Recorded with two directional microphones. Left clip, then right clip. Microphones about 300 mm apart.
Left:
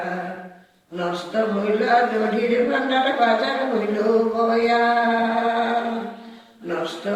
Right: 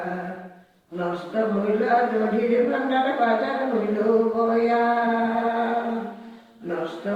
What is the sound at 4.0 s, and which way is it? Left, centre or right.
Music, centre.